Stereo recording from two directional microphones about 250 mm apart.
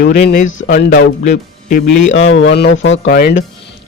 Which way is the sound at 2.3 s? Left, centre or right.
Left.